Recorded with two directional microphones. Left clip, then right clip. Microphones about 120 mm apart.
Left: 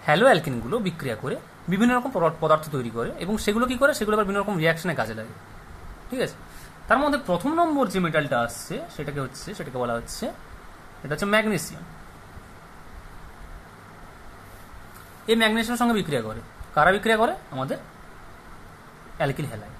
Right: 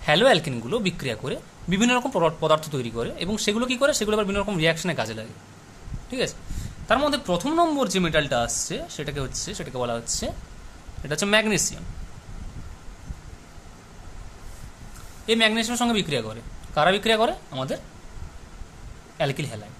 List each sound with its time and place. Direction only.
0.0 s speech: 5° right (ahead or behind)
1.9 s a man's voice: 30° right (ahead or behind)
2.4 s speech: 10° right (ahead or behind)
15.2 s speech: 5° right (ahead or behind)
19.1 s speech: 10° right (ahead or behind)